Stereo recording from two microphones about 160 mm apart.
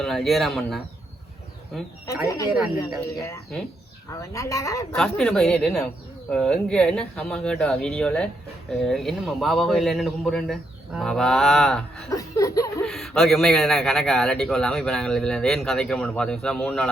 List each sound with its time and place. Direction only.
0.0 s speech: centre (ahead or behind)
2.2 s speech: 20° left (ahead or behind)
4.2 s speech: 20° left (ahead or behind)
4.9 s speech: centre (ahead or behind)
12.1 s speech: 20° left (ahead or behind)
12.8 s speech: centre (ahead or behind)